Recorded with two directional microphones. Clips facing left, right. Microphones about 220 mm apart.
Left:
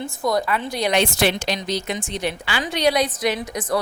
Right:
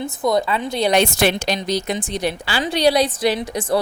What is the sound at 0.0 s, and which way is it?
Speech, 20° right (ahead or behind).